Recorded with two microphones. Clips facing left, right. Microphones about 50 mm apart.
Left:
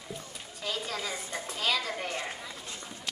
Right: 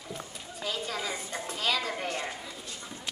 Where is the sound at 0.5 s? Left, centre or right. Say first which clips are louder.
Right 1 dB; centre.